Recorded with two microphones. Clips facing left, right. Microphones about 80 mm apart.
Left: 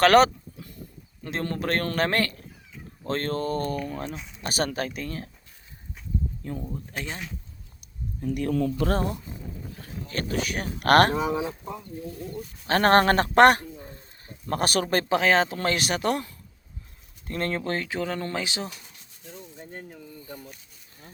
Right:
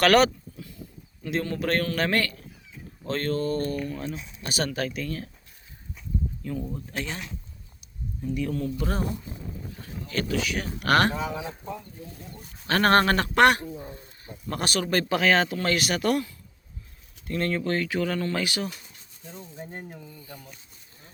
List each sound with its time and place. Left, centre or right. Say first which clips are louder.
0.0 s speech: left 2 dB; left
6.4 s speech: right 2 dB; left
8.2 s speech: left 3 dB; left
10.1 s speech: right 1 dB; left
11.3 s speech: left 6 dB; left
12.6 s speech: left 2 dB; left
19.5 s speech: right 4 dB; centre